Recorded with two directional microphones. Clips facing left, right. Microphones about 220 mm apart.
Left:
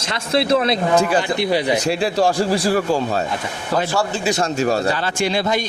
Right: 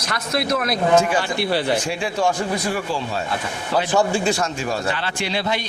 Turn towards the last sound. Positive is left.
turn(degrees=45)  # may be behind; listen again after turning